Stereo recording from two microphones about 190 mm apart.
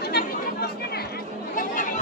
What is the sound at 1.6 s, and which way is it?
Chatter, 45° left (ahead or behind).